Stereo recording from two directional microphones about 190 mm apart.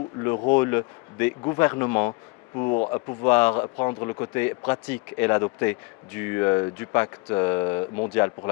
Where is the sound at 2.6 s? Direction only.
30° left (ahead or behind).